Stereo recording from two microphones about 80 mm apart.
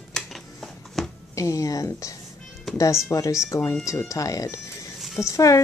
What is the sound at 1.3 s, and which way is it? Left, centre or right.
A woman's voice, left.